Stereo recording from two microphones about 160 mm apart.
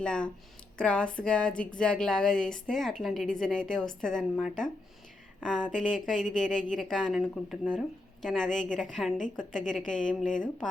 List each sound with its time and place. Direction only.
0.0 s a woman's voice: 5° left (ahead or behind)